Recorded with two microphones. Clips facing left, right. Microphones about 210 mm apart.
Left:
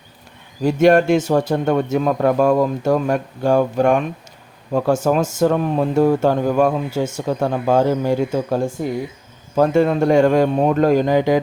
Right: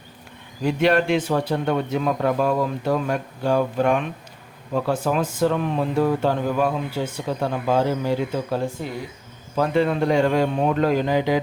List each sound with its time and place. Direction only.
0.6 s speech: 45° left (ahead or behind)